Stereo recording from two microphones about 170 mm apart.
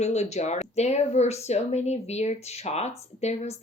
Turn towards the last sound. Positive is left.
turn(degrees=40)  # may be behind; listen again after turning